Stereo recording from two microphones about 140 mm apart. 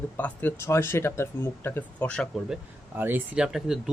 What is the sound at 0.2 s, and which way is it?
Speech, 15° left (ahead or behind).